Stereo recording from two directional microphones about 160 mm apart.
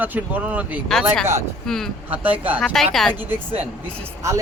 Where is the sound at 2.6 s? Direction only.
Centre (ahead or behind).